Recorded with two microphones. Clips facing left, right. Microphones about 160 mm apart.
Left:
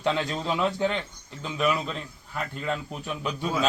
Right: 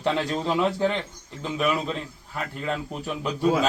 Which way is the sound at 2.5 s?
Centre (ahead or behind).